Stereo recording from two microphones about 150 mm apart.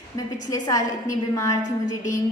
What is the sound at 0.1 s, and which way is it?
A woman's voice, 30° left (ahead or behind).